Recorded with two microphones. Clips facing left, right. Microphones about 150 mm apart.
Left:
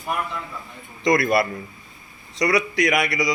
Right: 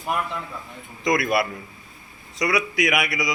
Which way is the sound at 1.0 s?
Centre (ahead or behind).